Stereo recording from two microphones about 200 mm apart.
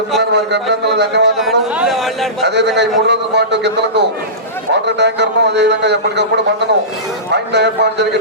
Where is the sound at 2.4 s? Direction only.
60° right (ahead or behind).